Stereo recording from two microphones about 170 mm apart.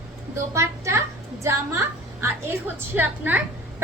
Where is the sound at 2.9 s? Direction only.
10° right (ahead or behind).